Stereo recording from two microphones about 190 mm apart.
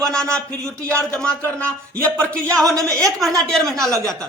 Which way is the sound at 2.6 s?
15° right (ahead or behind).